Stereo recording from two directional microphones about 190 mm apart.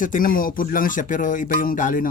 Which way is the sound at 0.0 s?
45° left (ahead or behind).